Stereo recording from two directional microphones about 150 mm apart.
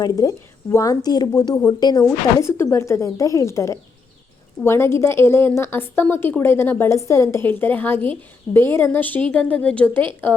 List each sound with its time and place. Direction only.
0.0 s a woman's voice: 25° left (ahead or behind)